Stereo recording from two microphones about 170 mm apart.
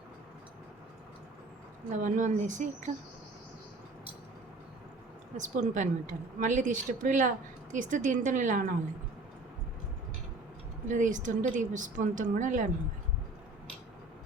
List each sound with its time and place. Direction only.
1.9 s a woman's voice: 50° right (ahead or behind)
5.4 s a woman's voice: 45° right (ahead or behind)
10.8 s a woman's voice: 50° right (ahead or behind)